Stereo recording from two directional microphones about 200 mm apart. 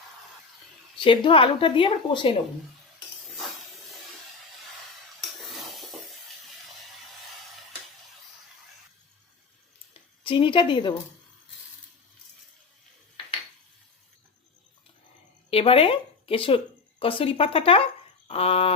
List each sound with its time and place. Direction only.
0.9 s a woman's voice: 25° left (ahead or behind)
5.4 s a sound: centre (ahead or behind)
9.9 s a woman's voice: 25° left (ahead or behind)
15.4 s a woman's voice: 30° left (ahead or behind)